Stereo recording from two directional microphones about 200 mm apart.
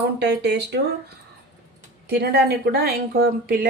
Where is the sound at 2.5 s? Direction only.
50° right (ahead or behind).